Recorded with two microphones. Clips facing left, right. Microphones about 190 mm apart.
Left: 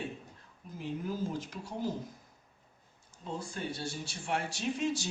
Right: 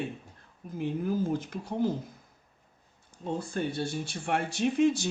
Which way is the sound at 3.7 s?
55° right (ahead or behind).